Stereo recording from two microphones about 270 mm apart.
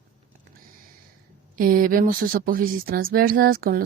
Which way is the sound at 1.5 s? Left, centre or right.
Right.